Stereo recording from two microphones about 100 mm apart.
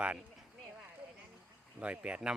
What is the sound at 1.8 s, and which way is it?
Speech, 10° right (ahead or behind).